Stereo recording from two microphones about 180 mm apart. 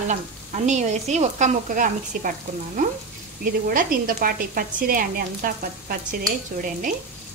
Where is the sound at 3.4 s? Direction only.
50° right (ahead or behind).